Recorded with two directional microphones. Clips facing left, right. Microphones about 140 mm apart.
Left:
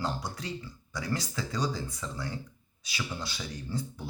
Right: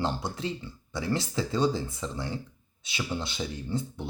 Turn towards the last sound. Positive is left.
turn(degrees=-25)  # may be behind; listen again after turning